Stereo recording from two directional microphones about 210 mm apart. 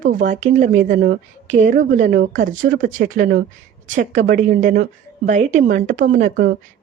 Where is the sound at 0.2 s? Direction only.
35° right (ahead or behind).